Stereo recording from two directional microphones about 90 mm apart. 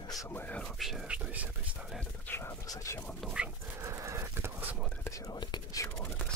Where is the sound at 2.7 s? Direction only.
35° left (ahead or behind).